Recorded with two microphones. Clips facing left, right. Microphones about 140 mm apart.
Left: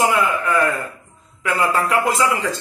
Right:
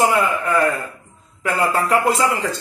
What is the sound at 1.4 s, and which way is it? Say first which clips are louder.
Speech: even; 50° right (ahead or behind).